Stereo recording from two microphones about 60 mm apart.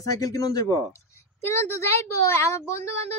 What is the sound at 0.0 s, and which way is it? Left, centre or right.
Speech, left.